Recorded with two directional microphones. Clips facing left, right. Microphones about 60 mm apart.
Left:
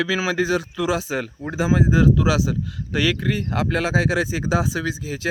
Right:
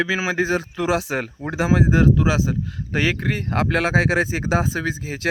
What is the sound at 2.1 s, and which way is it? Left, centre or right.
Speech, right.